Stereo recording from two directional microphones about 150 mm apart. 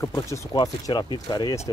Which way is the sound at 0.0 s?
20° left (ahead or behind).